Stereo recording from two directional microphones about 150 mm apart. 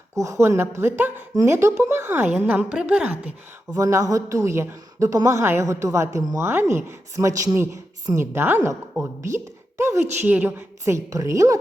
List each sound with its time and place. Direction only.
0.2 s speech: 20° right (ahead or behind)
3.8 s a woman's voice: 20° right (ahead or behind)